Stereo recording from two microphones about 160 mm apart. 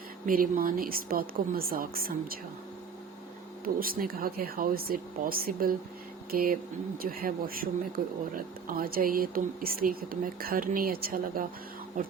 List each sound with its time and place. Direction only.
0.3 s speech: 65° right (ahead or behind)
3.6 s speech: 65° right (ahead or behind)